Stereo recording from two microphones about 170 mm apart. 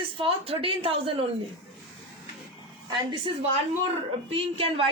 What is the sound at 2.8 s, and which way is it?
A woman's voice, 30° right (ahead or behind).